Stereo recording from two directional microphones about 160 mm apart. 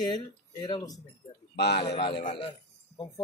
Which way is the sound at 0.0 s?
25° left (ahead or behind).